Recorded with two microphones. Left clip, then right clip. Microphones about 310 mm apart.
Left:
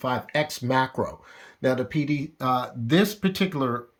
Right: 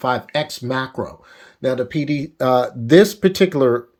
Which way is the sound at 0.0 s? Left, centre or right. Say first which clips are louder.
Right 5 dB; centre.